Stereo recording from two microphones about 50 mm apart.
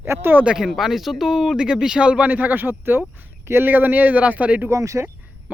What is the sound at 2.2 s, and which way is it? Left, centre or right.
A man's voice, right.